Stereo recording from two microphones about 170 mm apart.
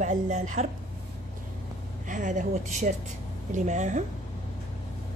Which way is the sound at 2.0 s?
50° right (ahead or behind).